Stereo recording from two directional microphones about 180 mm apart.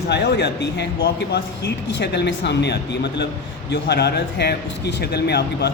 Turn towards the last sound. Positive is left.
turn(degrees=65)  # may be behind; listen again after turning